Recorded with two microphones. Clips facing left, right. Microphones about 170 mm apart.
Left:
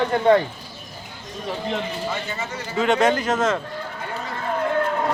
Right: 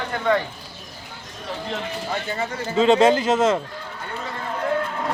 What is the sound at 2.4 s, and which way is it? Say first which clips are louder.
A man's voice: right 6 dB; 30° right (ahead or behind).